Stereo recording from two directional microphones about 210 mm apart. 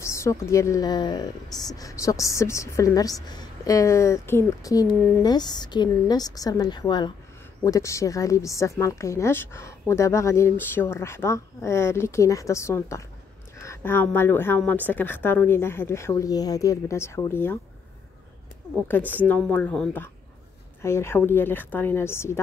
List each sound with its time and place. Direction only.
0.0 s speech: 15° left (ahead or behind)
18.9 s speech: 10° left (ahead or behind)